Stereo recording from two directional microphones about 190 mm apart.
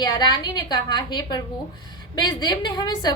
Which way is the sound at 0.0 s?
20° left (ahead or behind).